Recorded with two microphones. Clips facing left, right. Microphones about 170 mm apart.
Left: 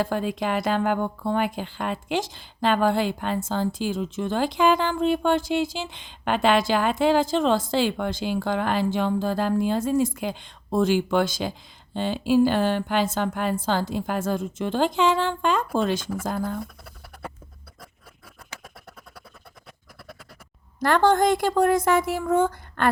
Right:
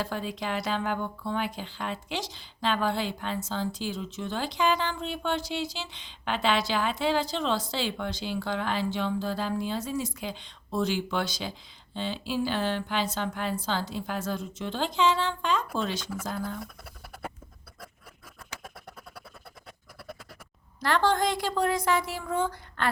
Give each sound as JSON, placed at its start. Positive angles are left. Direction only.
{"t": 0.0, "sound": "speech", "side_deg": 50}
{"t": 20.7, "sound": "speech", "side_deg": 50}